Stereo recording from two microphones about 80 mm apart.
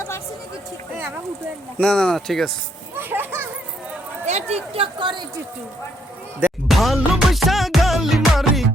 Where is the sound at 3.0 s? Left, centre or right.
Right.